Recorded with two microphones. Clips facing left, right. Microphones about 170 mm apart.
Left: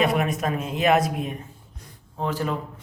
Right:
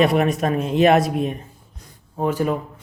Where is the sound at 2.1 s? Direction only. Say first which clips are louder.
Right 6 dB; 15° right (ahead or behind).